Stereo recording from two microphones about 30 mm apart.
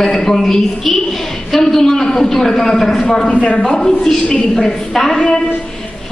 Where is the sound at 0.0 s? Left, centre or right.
Centre.